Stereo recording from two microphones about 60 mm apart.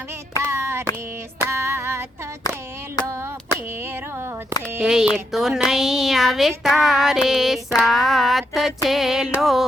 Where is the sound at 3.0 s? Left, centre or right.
Left.